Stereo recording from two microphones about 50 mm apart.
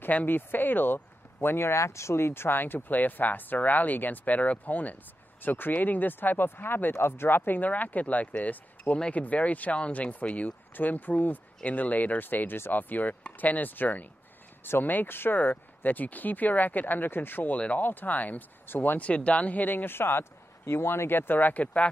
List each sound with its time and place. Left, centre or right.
0.1 s a man's voice: left
1.8 s speech: left
18.9 s a man's voice: left